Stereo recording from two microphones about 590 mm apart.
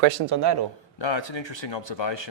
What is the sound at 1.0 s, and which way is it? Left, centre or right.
Speech, left.